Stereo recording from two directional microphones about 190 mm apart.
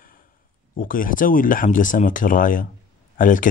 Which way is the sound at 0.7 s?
45° left (ahead or behind).